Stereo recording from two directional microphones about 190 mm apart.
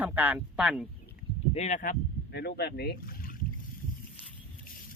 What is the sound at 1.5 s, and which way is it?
Speech, 35° left (ahead or behind).